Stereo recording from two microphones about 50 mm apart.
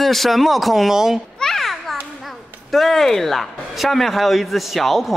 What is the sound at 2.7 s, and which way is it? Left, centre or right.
Speech, centre.